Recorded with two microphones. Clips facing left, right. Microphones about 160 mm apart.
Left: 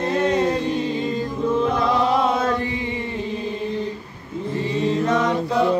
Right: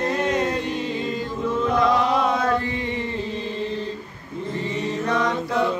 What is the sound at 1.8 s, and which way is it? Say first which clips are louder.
Chant: left 1 dB; 25° left (ahead or behind).